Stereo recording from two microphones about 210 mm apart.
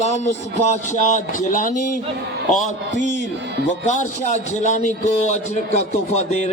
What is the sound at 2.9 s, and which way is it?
Speech, 60° left (ahead or behind).